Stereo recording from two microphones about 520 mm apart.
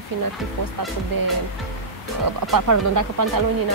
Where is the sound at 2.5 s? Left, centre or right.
Right.